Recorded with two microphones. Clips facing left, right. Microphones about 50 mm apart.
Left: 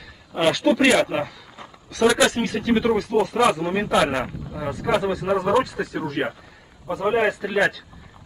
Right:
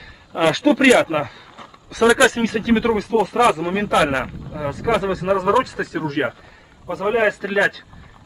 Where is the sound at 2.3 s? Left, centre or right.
Right.